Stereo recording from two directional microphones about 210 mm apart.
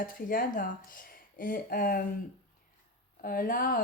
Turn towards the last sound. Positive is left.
turn(degrees=40)  # may be behind; listen again after turning